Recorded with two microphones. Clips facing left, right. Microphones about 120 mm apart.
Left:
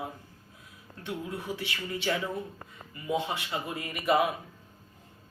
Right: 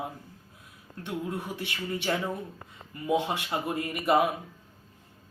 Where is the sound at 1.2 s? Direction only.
50° right (ahead or behind).